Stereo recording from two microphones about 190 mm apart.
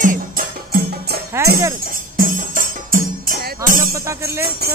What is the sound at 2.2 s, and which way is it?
Music, 45° right (ahead or behind).